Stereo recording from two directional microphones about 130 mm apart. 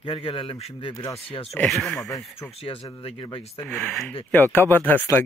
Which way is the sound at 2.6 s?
45° left (ahead or behind).